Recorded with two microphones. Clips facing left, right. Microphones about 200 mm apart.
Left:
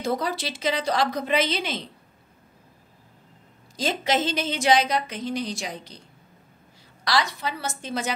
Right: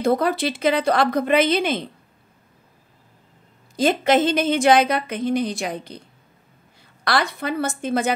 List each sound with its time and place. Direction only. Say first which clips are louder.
0.0 s a woman's voice: right 7 dB; 55° right (ahead or behind)
3.7 s a woman's voice: right 7 dB; 55° right (ahead or behind)
7.1 s a woman's voice: right 3 dB; 55° right (ahead or behind)